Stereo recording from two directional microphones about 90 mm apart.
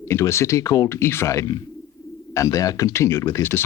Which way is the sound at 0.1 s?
30° left (ahead or behind).